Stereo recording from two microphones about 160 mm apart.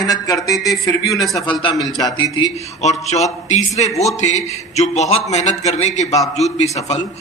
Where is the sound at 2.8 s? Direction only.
45° left (ahead or behind).